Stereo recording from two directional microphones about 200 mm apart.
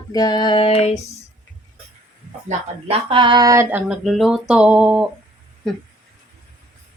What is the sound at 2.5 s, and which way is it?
Speech, 30° right (ahead or behind).